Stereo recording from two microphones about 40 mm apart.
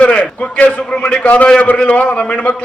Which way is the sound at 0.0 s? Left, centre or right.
Left.